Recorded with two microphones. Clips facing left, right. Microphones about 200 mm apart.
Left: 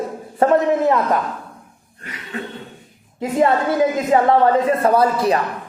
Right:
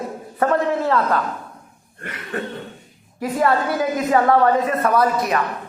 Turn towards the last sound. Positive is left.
turn(degrees=30)  # may be behind; listen again after turning